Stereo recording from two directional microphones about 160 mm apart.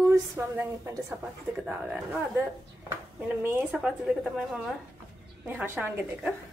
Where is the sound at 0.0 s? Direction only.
20° right (ahead or behind).